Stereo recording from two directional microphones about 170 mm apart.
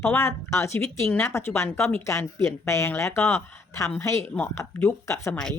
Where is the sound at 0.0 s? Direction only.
15° left (ahead or behind).